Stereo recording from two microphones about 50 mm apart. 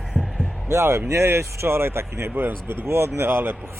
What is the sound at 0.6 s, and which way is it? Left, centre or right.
Speech, right.